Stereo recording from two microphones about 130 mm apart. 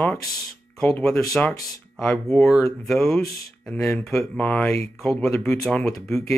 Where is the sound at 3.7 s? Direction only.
20° left (ahead or behind).